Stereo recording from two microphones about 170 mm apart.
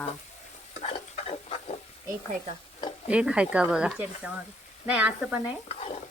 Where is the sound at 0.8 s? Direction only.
35° left (ahead or behind).